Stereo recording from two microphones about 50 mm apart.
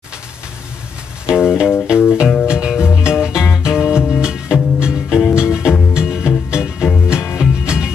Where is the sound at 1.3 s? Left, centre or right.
Centre.